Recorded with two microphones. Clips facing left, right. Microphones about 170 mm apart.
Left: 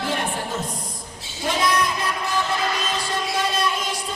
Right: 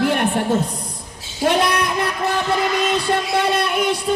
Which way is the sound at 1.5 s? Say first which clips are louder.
Right 3 dB; 65° right (ahead or behind).